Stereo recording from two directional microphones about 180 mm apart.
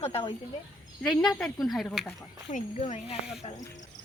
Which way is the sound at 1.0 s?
Centre (ahead or behind).